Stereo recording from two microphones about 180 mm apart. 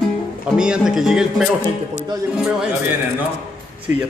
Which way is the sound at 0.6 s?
5° right (ahead or behind).